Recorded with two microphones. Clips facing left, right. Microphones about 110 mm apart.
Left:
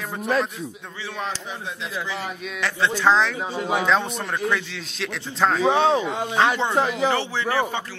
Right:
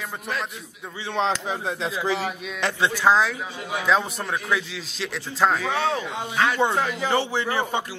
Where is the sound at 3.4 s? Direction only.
30° left (ahead or behind).